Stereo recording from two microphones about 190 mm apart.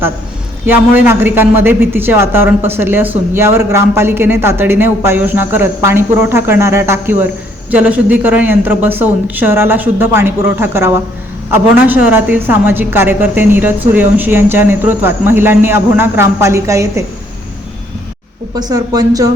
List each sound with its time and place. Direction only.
0.6 s a man's voice: 10° right (ahead or behind)
18.5 s speech: 20° right (ahead or behind)